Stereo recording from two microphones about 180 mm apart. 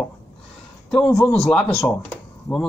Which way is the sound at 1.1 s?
15° left (ahead or behind).